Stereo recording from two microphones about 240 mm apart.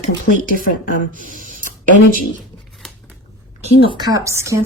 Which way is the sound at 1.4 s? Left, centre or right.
Right.